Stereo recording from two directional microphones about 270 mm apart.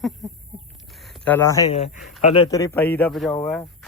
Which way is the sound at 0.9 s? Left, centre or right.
Centre.